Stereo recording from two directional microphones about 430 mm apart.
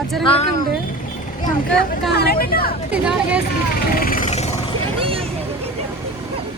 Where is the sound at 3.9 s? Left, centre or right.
Centre.